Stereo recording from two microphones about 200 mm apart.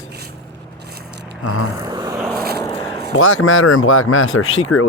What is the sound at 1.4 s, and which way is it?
Speech, 90° left.